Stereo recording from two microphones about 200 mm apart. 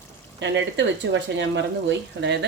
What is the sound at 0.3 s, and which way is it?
Speech, 65° right (ahead or behind).